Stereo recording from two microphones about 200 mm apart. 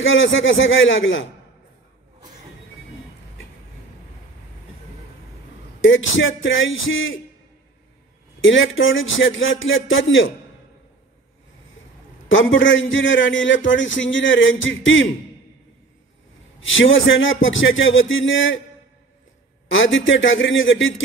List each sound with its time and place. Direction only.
0.0 s speech: 75° left (ahead or behind)
5.8 s speech: 75° left (ahead or behind)
8.4 s speech: 75° left (ahead or behind)
12.3 s speech: 70° left (ahead or behind)
16.5 s speech: 75° left (ahead or behind)
19.7 s speech: 75° left (ahead or behind)